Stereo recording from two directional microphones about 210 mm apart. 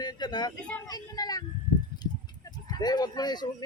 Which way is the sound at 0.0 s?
20° left (ahead or behind).